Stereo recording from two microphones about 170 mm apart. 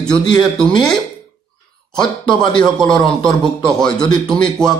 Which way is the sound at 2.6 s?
5° left (ahead or behind).